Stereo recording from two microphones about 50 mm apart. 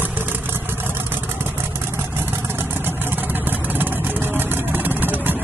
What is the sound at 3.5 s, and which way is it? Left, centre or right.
Vehicle, right.